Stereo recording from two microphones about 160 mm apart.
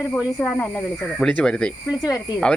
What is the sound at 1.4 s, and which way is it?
Speech, 5° left (ahead or behind).